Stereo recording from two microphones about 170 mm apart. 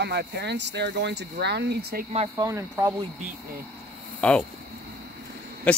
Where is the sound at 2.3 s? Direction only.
20° right (ahead or behind).